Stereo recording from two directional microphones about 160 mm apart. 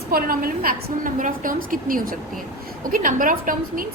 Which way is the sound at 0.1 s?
65° right (ahead or behind).